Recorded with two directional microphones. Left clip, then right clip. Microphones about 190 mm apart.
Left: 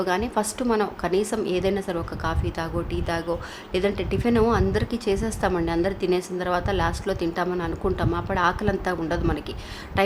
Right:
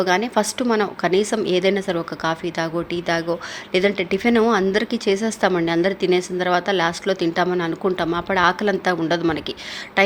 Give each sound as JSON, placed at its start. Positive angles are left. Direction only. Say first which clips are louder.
{"t": 0.0, "sound": "a woman's voice", "louder": "right 5 dB", "side_deg": -15}